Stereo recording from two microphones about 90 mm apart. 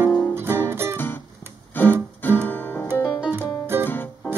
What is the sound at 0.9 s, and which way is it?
Music, 25° left (ahead or behind).